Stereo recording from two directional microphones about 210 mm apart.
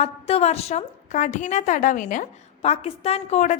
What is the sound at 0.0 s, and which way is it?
A woman's voice, 30° left (ahead or behind).